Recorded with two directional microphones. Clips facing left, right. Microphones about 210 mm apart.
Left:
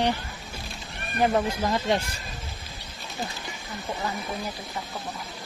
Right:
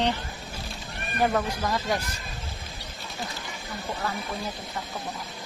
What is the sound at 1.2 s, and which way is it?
Speech, 25° left (ahead or behind).